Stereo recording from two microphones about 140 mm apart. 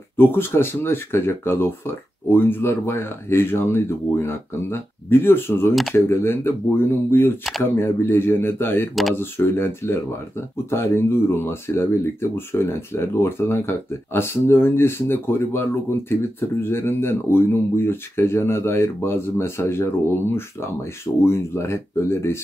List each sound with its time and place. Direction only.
0.2 s speech: 15° left (ahead or behind)